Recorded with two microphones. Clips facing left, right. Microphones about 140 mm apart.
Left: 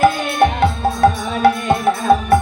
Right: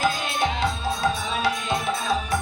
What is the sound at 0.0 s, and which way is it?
Music, 60° left (ahead or behind).